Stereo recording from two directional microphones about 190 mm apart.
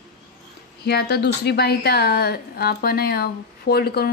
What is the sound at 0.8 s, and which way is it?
A woman's voice, 60° left (ahead or behind).